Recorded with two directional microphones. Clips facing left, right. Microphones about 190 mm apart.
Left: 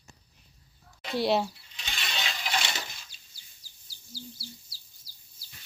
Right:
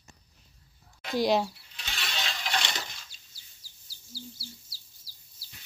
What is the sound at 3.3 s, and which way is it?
Bird, 20° left (ahead or behind).